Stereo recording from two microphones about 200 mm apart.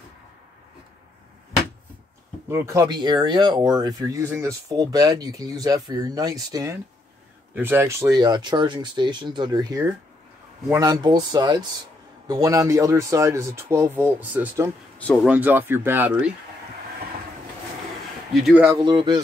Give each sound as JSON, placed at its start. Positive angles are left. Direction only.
{"t": 2.4, "sound": "speech", "side_deg": -15}
{"t": 15.0, "sound": "speech", "side_deg": 5}
{"t": 15.2, "sound": "speech", "side_deg": -10}
{"t": 18.3, "sound": "speech", "side_deg": -5}
{"t": 18.7, "sound": "speech", "side_deg": -20}